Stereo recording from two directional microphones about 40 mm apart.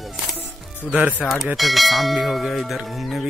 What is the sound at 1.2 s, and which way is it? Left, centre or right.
Clang, centre.